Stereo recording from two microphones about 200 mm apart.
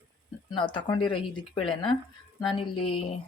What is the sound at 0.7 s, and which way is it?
Speech, 20° left (ahead or behind).